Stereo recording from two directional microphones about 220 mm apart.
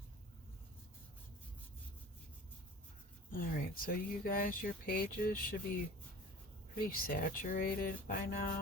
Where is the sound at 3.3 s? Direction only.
40° left (ahead or behind).